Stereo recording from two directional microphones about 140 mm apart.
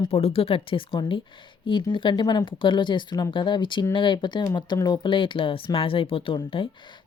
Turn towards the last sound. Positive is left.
turn(degrees=35)  # may be behind; listen again after turning